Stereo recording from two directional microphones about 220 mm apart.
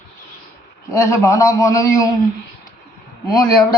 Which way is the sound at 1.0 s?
15° left (ahead or behind).